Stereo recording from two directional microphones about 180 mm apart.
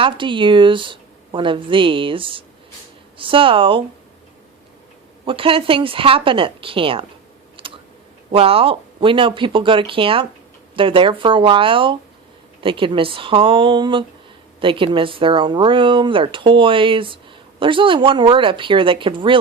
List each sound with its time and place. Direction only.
0.0 s speech: 25° right (ahead or behind)
5.2 s speech: 30° right (ahead or behind)
7.6 s a sound: 30° right (ahead or behind)
8.3 s speech: 30° right (ahead or behind)